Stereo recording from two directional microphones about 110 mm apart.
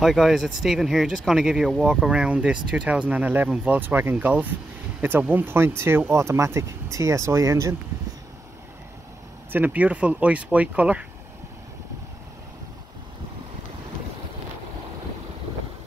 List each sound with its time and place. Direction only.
0.0 s speech: centre (ahead or behind); by 7.7 s 25° right (ahead or behind)
9.5 s speech: 15° right (ahead or behind)